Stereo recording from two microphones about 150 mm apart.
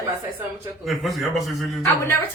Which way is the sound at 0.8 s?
Centre (ahead or behind).